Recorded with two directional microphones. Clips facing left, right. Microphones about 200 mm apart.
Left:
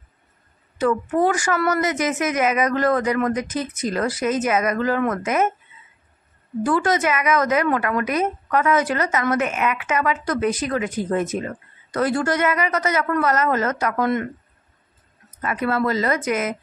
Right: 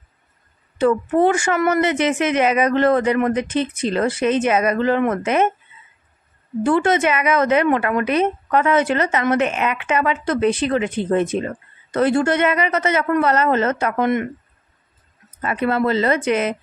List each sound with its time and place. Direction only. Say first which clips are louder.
0.7 s a woman's voice: right 3 dB; 25° right (ahead or behind)
6.6 s a woman's voice: right 3 dB; 25° right (ahead or behind)
15.4 s a woman's voice: right 3 dB; 25° right (ahead or behind)